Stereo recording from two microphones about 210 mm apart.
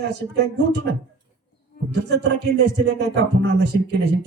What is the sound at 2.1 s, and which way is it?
Music, 55° right (ahead or behind).